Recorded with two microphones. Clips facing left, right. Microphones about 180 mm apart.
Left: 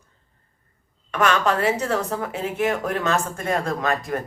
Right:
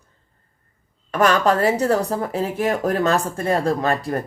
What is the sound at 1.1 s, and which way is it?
Speech, 40° right (ahead or behind).